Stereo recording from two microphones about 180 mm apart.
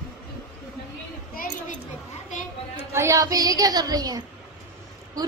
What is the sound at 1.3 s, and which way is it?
Speech, 50° left (ahead or behind).